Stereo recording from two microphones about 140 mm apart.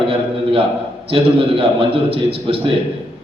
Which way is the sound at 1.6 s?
45° right (ahead or behind).